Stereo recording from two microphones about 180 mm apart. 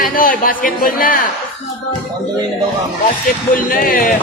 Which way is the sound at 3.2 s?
50° left (ahead or behind).